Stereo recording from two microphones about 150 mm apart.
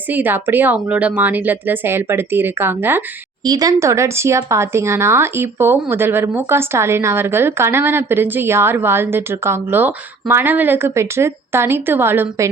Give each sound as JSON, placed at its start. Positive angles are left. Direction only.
{"t": 0.1, "sound": "speech", "side_deg": -10}
{"t": 3.4, "sound": "speech", "side_deg": -25}